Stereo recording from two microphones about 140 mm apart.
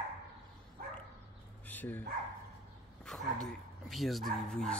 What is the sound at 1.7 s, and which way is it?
Dog, 15° left (ahead or behind).